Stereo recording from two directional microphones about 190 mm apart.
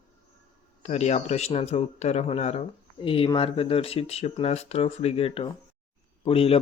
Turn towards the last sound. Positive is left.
turn(degrees=30)  # may be behind; listen again after turning